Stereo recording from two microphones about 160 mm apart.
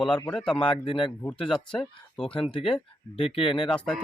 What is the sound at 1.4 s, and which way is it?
Speech, 5° left (ahead or behind).